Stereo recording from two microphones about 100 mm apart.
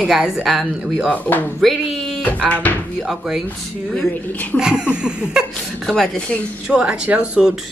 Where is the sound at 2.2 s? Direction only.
15° left (ahead or behind).